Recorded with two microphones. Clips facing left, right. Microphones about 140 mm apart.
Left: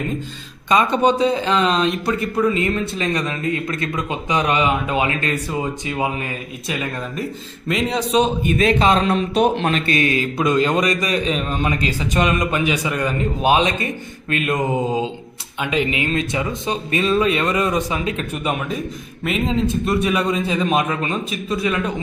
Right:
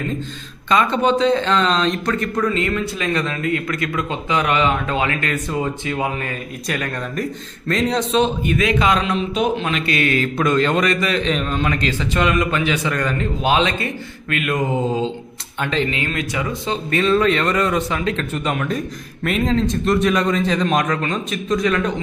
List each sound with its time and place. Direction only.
0.7 s a man's voice: 15° left (ahead or behind)
6.7 s a man's voice: 5° left (ahead or behind)
8.5 s speech: 30° left (ahead or behind)
10.0 s a man's voice: 20° left (ahead or behind)